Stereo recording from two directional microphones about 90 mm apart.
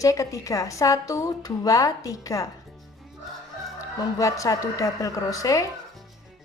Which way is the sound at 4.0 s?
35° left (ahead or behind).